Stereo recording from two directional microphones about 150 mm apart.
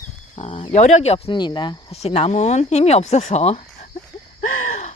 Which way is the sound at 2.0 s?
45° left (ahead or behind).